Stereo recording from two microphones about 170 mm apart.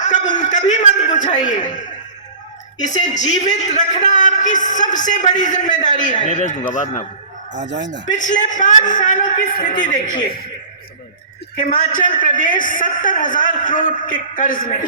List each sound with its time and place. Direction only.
0.0 s a sound: 45° left (ahead or behind)
2.7 s a man's voice: 45° left (ahead or behind)
7.6 s speech: 90° right
8.0 s a man's voice: 50° left (ahead or behind)
11.8 s a man's voice: 50° left (ahead or behind)